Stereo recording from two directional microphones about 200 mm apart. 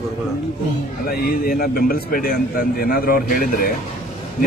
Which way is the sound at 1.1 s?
50° left (ahead or behind).